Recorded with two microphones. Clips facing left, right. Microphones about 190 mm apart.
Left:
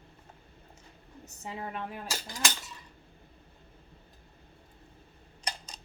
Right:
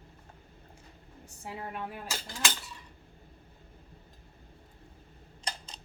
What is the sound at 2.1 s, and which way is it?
Cutlery, 15° left (ahead or behind).